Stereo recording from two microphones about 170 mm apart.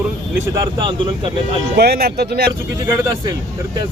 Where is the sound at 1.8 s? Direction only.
65° right (ahead or behind).